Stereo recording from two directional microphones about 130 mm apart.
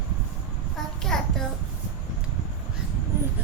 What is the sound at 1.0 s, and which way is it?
Child singing, 5° left (ahead or behind).